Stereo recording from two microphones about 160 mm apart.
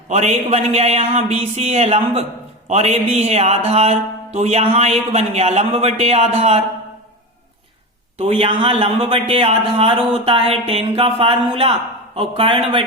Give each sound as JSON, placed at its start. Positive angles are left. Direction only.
{"t": 0.1, "sound": "a man's voice", "side_deg": -45}
{"t": 8.2, "sound": "speech", "side_deg": -40}